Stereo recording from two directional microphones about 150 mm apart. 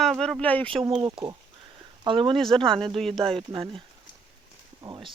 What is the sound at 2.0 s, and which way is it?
Speech, 35° right (ahead or behind).